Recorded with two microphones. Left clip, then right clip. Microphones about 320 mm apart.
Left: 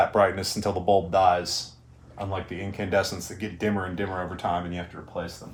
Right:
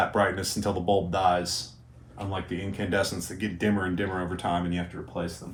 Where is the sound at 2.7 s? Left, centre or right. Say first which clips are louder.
Left 3 dB; centre.